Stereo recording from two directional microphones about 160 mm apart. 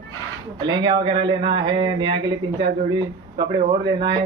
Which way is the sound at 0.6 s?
25° right (ahead or behind).